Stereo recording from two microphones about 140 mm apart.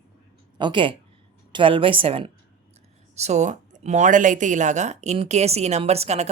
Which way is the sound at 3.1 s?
55° right (ahead or behind).